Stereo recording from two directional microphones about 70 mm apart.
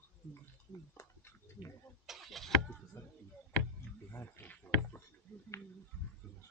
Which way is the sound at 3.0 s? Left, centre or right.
Left.